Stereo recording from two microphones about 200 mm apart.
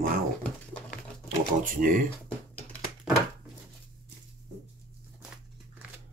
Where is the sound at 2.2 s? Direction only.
5° left (ahead or behind).